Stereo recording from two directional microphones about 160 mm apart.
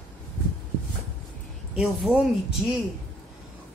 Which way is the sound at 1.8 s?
5° right (ahead or behind).